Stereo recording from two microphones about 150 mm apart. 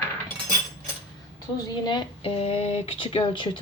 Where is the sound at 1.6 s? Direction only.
30° left (ahead or behind).